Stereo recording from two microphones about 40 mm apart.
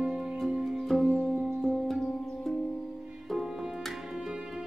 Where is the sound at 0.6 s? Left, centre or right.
Centre.